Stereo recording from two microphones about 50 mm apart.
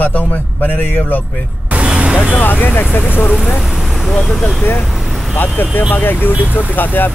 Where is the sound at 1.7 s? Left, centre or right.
Right.